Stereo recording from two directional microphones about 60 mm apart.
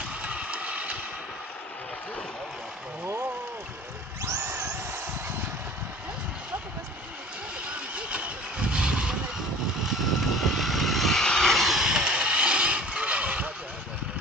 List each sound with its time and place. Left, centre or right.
0.2 s a sound: right
7.6 s vehicle: right
9.8 s vehicle: centre; by 13.5 s right